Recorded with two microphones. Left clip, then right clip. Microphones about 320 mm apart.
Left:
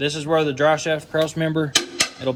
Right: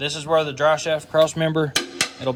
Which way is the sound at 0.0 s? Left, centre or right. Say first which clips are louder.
Even; centre.